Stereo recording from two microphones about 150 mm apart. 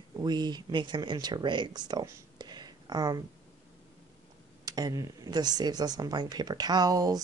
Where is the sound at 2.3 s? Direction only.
30° right (ahead or behind).